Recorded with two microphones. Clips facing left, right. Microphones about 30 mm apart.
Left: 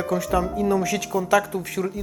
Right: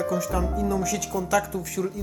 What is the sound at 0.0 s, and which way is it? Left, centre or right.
Speech, left.